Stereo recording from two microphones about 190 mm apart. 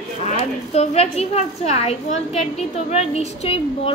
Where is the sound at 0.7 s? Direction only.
35° left (ahead or behind).